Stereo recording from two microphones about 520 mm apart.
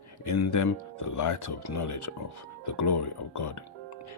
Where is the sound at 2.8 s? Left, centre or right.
Left.